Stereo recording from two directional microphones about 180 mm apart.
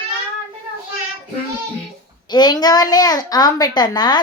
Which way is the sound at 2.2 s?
25° left (ahead or behind).